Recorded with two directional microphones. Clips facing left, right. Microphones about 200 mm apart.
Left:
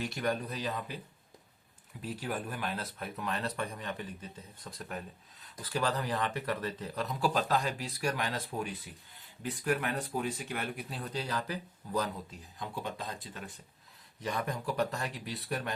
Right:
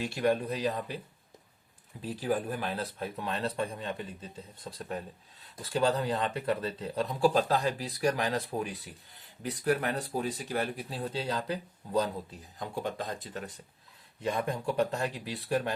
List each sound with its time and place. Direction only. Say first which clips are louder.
0.2 s speech: right 7 dB; 30° right (ahead or behind)
2.0 s speech: right 6 dB; 35° right (ahead or behind)
12.5 s speech: right 4 dB; 45° right (ahead or behind)
14.2 s speech: right 4 dB; 30° right (ahead or behind)